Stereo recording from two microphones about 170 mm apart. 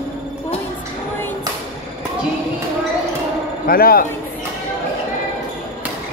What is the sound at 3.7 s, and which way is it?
Speech, 60° left (ahead or behind).